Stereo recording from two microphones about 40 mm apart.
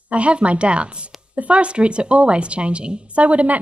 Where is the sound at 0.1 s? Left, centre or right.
Right.